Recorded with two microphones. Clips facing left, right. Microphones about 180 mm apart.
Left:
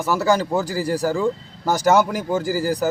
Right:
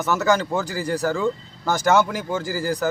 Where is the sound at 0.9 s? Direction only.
10° left (ahead or behind).